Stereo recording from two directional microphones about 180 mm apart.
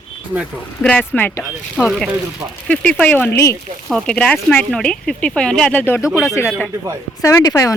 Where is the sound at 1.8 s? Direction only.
Centre (ahead or behind).